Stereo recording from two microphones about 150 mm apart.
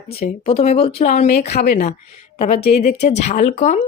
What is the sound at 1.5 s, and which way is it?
Speech, 90° left.